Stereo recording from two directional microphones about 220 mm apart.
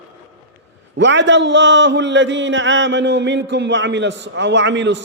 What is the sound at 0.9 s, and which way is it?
A man's voice, 55° right (ahead or behind).